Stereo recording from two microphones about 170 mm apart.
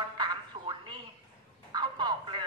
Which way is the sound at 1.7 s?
25° right (ahead or behind).